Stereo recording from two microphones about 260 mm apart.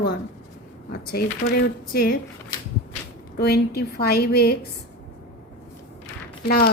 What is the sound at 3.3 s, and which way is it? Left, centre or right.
A woman's voice, left.